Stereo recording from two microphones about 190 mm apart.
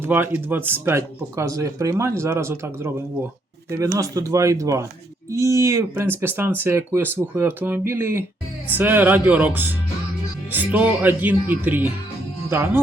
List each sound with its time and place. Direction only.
0.0 s speech: 10° right (ahead or behind)
3.9 s speech: 15° right (ahead or behind)